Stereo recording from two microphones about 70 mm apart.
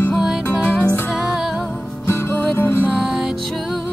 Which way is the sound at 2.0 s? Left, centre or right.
Left.